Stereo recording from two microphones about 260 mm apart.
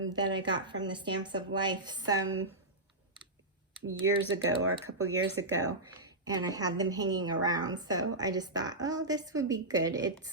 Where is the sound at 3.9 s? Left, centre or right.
Right.